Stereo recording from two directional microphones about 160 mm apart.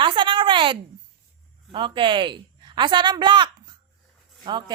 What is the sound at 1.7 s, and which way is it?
A woman's voice, 30° right (ahead or behind).